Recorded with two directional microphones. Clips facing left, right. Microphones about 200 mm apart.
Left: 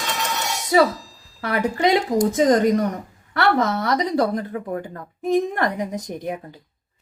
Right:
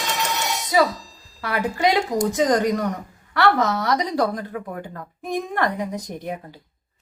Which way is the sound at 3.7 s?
20° left (ahead or behind).